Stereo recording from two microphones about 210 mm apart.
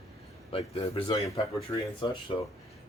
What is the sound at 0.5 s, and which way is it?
Speech, 25° left (ahead or behind).